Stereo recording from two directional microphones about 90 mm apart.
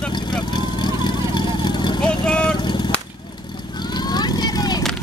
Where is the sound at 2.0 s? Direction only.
10° left (ahead or behind).